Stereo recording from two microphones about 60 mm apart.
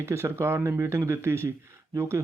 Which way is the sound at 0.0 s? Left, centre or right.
Right.